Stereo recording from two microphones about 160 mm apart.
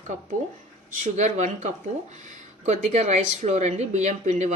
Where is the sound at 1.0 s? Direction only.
50° right (ahead or behind).